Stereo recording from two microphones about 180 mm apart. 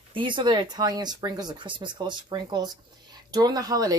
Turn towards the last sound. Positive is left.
turn(degrees=-20)  # may be behind; listen again after turning